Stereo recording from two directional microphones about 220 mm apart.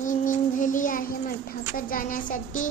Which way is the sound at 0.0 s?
35° left (ahead or behind).